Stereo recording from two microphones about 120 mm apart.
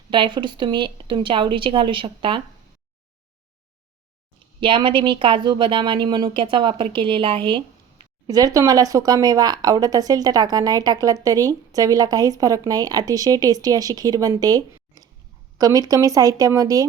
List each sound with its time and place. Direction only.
0.1 s speech: 40° right (ahead or behind)
4.6 s speech: 45° right (ahead or behind)
8.3 s speech: 30° right (ahead or behind)